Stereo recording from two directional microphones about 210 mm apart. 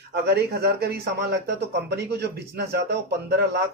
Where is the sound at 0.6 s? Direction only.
50° right (ahead or behind).